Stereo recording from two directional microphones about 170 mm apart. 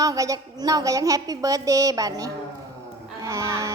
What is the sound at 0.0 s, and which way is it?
A woman's voice, 20° right (ahead or behind).